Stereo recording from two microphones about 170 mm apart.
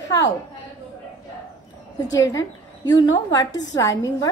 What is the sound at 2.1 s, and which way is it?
A woman's voice, 20° left (ahead or behind).